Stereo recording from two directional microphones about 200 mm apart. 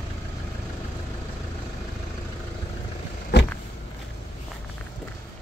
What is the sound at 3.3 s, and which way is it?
Vehicle, 60° left (ahead or behind).